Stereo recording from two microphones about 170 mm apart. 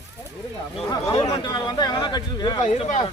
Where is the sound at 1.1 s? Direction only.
30° left (ahead or behind).